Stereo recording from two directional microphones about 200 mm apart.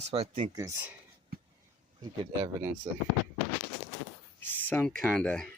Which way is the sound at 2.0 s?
20° right (ahead or behind).